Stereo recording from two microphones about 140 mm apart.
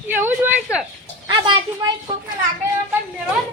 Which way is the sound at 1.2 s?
35° right (ahead or behind).